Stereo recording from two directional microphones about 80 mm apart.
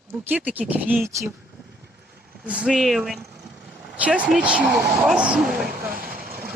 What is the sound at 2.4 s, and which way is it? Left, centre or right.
Speech, centre.